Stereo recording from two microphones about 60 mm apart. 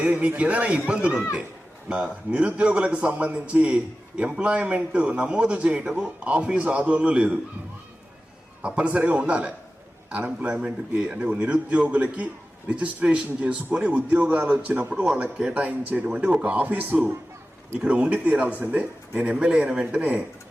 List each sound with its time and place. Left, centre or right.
0.0 s a man's voice: right
8.6 s a man's voice: centre
17.7 s a man's voice: centre